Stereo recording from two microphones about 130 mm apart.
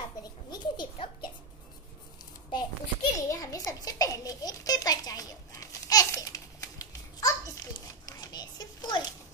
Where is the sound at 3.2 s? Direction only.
25° left (ahead or behind).